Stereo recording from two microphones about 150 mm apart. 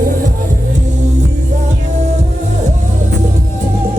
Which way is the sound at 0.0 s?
65° right (ahead or behind).